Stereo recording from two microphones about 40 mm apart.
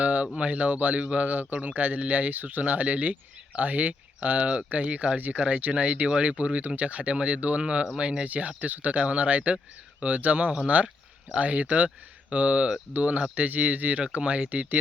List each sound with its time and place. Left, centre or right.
0.0 s a sound: right
0.4 s speech: right
4.4 s speech: right
8.3 s speech: right
14.3 s speech: right